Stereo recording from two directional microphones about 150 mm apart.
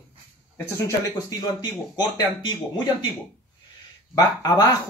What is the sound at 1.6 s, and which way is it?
Speech, 30° left (ahead or behind).